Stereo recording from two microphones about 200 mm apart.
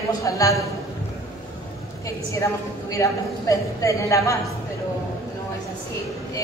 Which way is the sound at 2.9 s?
15° left (ahead or behind).